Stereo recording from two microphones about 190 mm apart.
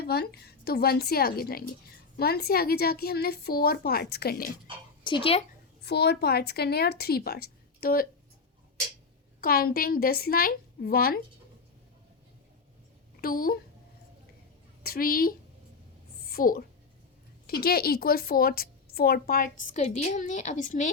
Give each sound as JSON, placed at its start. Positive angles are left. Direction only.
{"t": 0.0, "sound": "a woman's voice", "side_deg": 55}
{"t": 5.0, "sound": "speech", "side_deg": 25}
{"t": 5.8, "sound": "a woman's voice", "side_deg": 60}
{"t": 9.4, "sound": "a woman's voice", "side_deg": 50}
{"t": 13.2, "sound": "a woman's voice", "side_deg": 50}
{"t": 14.8, "sound": "a woman's voice", "side_deg": 50}